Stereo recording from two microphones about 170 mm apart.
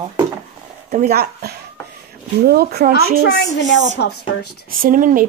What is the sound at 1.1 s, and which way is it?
Speech, 65° right (ahead or behind).